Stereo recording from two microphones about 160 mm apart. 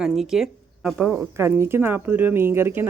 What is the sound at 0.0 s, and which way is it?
Speech, 5° right (ahead or behind).